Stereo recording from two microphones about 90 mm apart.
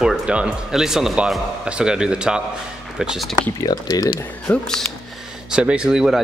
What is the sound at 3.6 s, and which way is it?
Speech, 40° left (ahead or behind).